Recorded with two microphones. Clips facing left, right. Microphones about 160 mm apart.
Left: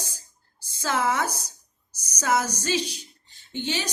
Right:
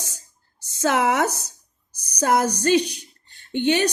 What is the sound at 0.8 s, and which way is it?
A woman's voice, 65° right (ahead or behind).